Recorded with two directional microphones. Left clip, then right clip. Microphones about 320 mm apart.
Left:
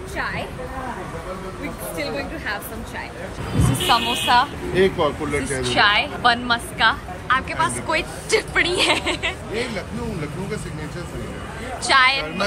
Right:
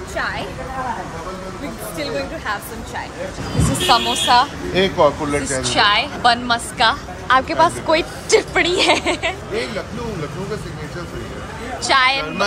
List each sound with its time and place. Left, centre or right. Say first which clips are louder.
2.0 s a woman's voice: right 4 dB; centre
3.9 s a woman's voice: right 3 dB; centre
4.7 s speech: right 4 dB; right
5.6 s a woman's voice: right 1 dB; centre
11.8 s a woman's voice: right 1 dB; centre